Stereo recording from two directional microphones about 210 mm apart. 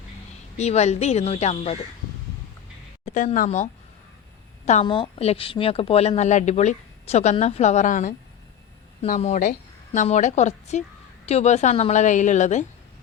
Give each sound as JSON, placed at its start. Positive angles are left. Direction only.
{"t": 0.5, "sound": "a woman's voice", "side_deg": 30}
{"t": 3.1, "sound": "a woman's voice", "side_deg": 35}